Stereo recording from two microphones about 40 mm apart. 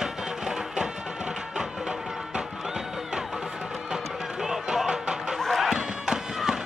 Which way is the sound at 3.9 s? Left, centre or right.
Centre.